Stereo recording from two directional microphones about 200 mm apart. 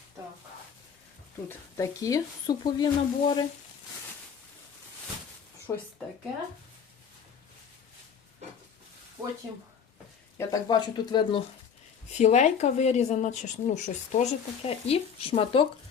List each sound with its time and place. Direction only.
1.5 s a woman's voice: 15° left (ahead or behind)
5.7 s a woman's voice: 10° left (ahead or behind)
10.3 s speech: 15° left (ahead or behind)
12.1 s speech: 35° left (ahead or behind)